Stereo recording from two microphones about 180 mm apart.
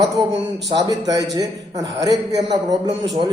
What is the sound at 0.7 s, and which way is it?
A man's voice, 20° right (ahead or behind).